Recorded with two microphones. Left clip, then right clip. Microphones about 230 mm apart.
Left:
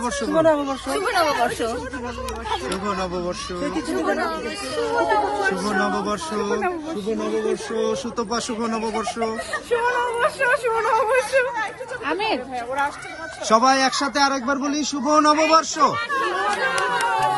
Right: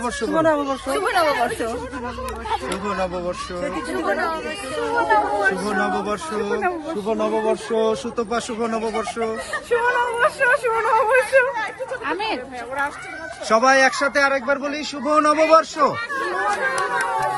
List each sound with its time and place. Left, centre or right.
0.0 s speech: centre
4.1 s speech: centre
7.8 s speech: centre
11.5 s speech: left
13.5 s a man's voice: centre
15.2 s speech: centre